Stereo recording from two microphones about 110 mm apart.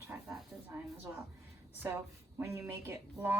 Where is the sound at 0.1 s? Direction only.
20° right (ahead or behind).